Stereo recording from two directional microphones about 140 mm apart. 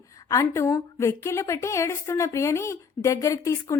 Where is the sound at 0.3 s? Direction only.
20° left (ahead or behind).